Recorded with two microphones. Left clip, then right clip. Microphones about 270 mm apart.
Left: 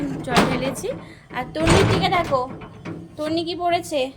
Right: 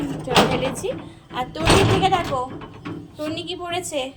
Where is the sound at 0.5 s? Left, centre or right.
Centre.